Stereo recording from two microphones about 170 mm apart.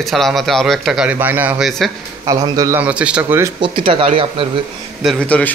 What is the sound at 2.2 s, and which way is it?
Speech, 20° right (ahead or behind).